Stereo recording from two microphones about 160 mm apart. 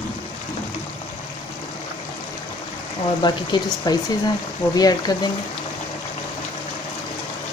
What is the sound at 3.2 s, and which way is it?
Speech, 25° left (ahead or behind).